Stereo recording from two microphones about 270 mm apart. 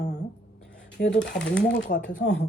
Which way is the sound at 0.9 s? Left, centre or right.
Left.